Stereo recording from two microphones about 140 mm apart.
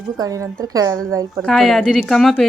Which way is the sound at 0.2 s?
25° right (ahead or behind).